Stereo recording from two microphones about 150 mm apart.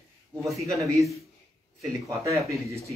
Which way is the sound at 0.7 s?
20° right (ahead or behind).